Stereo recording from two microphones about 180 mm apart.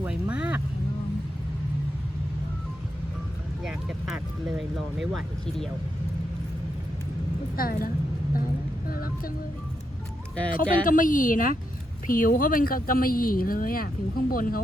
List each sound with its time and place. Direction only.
0.0 s vehicle: 5° right (ahead or behind)
3.6 s speech: 5° right (ahead or behind)
7.5 s a woman's voice: 55° left (ahead or behind)
8.9 s vehicle: 55° left (ahead or behind)
10.5 s speech: 50° left (ahead or behind)